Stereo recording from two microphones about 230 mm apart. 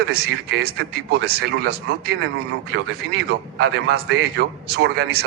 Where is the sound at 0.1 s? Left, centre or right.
Right.